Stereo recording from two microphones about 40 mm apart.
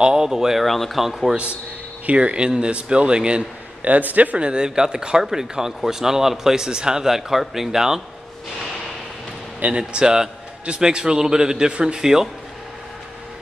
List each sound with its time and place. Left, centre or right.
0.0 s a man's voice: centre
0.7 s speech: centre
1.3 s a man's voice: right
3.8 s a man's voice: right
4.4 s a man's voice: right
9.6 s a man's voice: right